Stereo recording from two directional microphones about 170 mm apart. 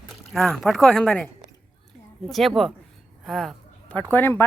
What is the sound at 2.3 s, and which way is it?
Speech, centre (ahead or behind).